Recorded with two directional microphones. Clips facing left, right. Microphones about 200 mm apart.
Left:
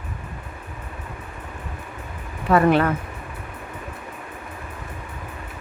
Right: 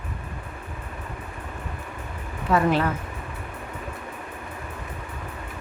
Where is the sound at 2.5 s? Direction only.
60° left (ahead or behind).